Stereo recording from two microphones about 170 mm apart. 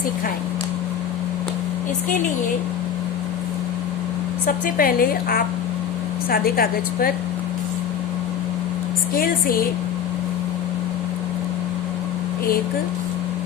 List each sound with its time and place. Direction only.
4.4 s a woman's voice: 55° left (ahead or behind)
9.1 s a woman's voice: 60° left (ahead or behind)